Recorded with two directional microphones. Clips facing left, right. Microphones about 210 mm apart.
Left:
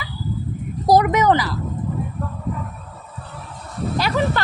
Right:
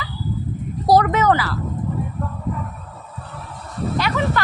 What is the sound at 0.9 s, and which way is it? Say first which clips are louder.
Speech: even; 15° left (ahead or behind).